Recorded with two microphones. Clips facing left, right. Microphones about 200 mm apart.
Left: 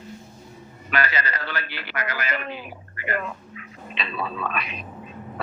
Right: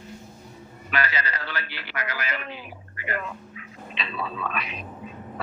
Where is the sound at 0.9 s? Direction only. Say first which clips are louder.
Left 2 dB; 55° left (ahead or behind).